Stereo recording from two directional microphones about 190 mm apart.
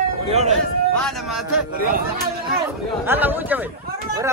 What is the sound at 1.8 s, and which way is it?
Speech, 50° right (ahead or behind).